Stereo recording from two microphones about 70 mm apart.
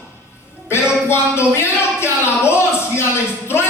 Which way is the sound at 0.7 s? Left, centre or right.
Left.